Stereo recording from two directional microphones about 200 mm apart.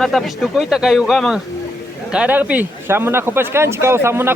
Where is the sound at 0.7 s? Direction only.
Centre (ahead or behind).